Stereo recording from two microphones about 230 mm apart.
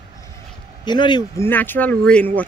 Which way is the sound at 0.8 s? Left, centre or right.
Centre.